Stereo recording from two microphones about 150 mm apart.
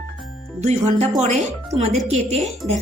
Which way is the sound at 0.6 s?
50° right (ahead or behind).